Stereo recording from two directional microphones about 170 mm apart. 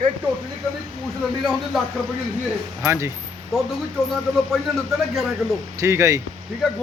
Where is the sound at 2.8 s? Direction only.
15° right (ahead or behind).